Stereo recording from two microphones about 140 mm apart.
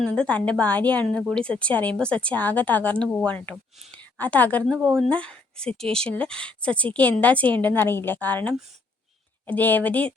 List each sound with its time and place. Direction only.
0.0 s a woman's voice: 10° left (ahead or behind)